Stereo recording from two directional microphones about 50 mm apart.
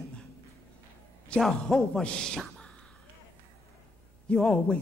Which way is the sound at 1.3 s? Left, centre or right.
Left.